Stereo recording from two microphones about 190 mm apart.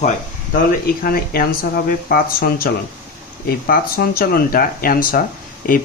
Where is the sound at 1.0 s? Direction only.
50° left (ahead or behind).